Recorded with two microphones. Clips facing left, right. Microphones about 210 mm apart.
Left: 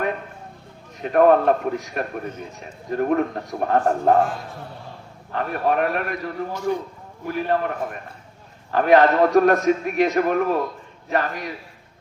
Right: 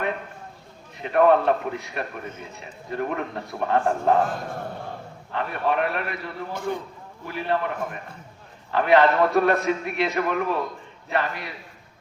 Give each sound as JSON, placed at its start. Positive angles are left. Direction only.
{"t": 1.0, "sound": "a man's voice", "side_deg": 45}
{"t": 4.3, "sound": "a man's voice", "side_deg": -50}
{"t": 5.3, "sound": "a man's voice", "side_deg": 40}
{"t": 6.5, "sound": "a man's voice", "side_deg": -50}
{"t": 7.3, "sound": "a man's voice", "side_deg": 45}
{"t": 8.7, "sound": "a man's voice", "side_deg": 45}